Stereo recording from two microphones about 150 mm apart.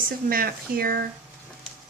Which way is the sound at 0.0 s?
75° right (ahead or behind).